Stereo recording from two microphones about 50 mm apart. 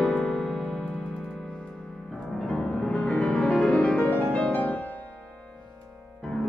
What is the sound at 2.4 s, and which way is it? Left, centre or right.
Music, centre.